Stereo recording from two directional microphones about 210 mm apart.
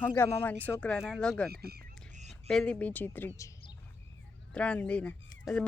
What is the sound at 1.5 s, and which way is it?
Speech, 45° right (ahead or behind).